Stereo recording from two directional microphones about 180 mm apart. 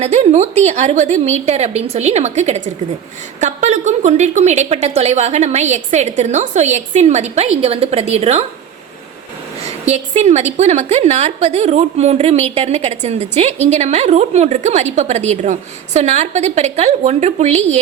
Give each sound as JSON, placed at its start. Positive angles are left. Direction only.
{"t": 0.0, "sound": "a woman's voice", "side_deg": -35}
{"t": 9.6, "sound": "a woman's voice", "side_deg": -35}